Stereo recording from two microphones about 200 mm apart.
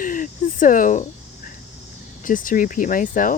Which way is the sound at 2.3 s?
40° left (ahead or behind).